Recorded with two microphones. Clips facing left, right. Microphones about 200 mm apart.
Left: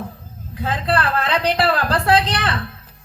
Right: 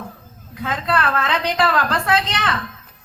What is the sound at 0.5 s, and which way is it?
A woman's voice, 35° left (ahead or behind).